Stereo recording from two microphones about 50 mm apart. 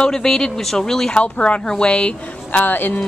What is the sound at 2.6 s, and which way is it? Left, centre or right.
Speech, left.